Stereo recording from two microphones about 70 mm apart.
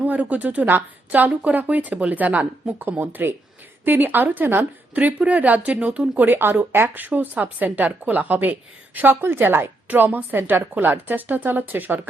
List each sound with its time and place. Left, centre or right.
0.0 s a woman's voice: right